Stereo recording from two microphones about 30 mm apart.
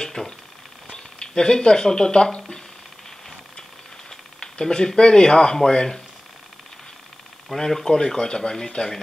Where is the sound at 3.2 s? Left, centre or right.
Centre.